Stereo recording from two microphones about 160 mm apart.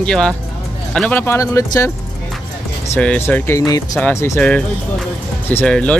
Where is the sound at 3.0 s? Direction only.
10° left (ahead or behind).